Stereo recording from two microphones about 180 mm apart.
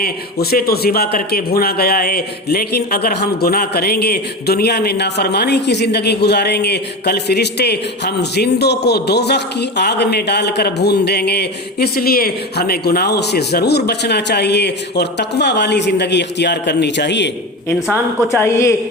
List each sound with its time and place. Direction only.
0.0 s a man's voice: 60° left (ahead or behind)
17.8 s a woman's voice: 5° right (ahead or behind)
18.3 s a woman's voice: 15° left (ahead or behind)